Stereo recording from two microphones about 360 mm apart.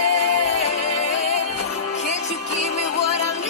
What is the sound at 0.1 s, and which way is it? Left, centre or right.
Music, left.